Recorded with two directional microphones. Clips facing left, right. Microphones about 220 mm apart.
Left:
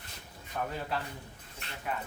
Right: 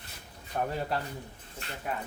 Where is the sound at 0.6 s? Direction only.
40° right (ahead or behind).